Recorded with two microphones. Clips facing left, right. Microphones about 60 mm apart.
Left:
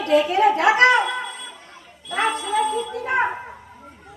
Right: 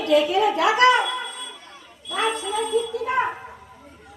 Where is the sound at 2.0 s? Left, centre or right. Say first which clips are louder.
Left 2 dB; left.